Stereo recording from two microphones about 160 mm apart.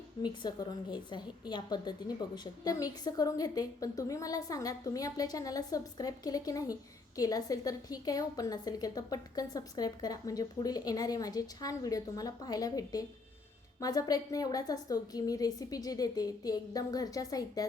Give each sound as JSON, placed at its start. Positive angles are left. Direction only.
{"t": 0.2, "sound": "a woman's voice", "side_deg": 30}